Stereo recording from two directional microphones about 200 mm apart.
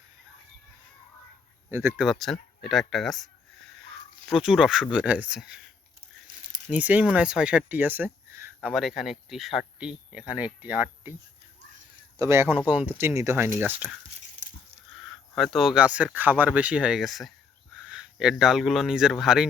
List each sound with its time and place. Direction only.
1.7 s speech: 10° right (ahead or behind)
4.3 s speech: centre (ahead or behind)
6.7 s speech: 5° right (ahead or behind)
8.7 s speech: centre (ahead or behind)
12.1 s speech: 15° right (ahead or behind)
14.4 s a sound: 35° right (ahead or behind)
14.9 s speech: centre (ahead or behind)